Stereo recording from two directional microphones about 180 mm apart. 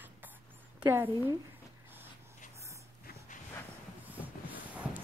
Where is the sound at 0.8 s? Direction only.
10° right (ahead or behind).